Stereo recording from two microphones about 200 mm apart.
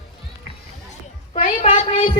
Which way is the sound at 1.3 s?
35° left (ahead or behind).